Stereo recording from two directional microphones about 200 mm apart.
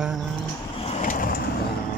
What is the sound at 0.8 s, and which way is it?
Vehicle, 35° left (ahead or behind).